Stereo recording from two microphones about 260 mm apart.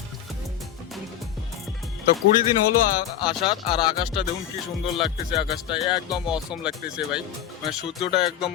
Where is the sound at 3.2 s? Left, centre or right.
Centre.